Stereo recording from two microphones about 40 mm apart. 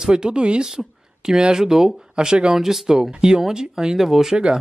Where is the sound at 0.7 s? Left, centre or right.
Centre.